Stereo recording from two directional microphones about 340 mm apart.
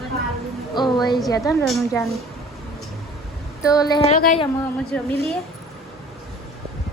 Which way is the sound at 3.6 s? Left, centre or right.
Centre.